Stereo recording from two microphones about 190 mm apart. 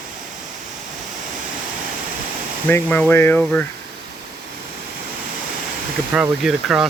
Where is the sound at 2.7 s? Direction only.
10° left (ahead or behind).